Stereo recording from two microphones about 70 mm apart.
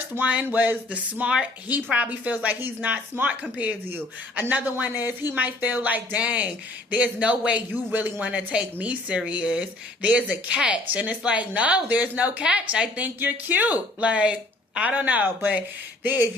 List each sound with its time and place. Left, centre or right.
0.1 s a woman's voice: right